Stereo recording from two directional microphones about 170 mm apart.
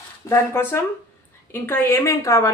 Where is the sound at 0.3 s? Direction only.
15° left (ahead or behind).